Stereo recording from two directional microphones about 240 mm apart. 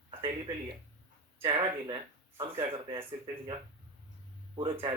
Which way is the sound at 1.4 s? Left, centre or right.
Right.